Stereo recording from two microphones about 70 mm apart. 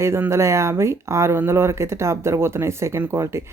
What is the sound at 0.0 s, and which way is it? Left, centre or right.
Speech, right.